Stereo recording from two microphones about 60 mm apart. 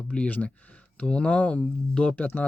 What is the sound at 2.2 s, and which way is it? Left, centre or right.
Speech, left.